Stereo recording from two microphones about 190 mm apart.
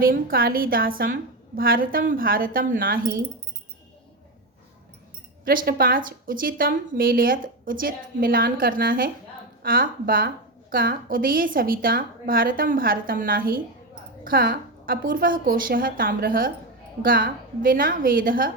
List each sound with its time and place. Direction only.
0.0 s a woman's voice: 50° right (ahead or behind)
5.5 s a woman's voice: 50° right (ahead or behind)